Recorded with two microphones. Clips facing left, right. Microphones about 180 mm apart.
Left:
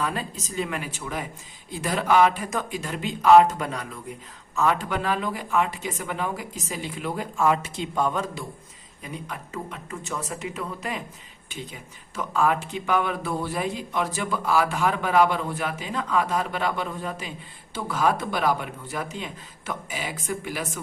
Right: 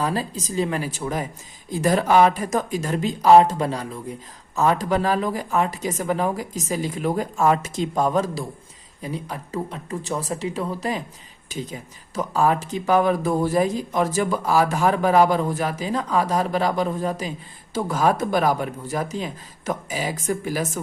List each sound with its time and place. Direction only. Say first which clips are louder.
0.0 s speech: right 4 dB; 35° right (ahead or behind)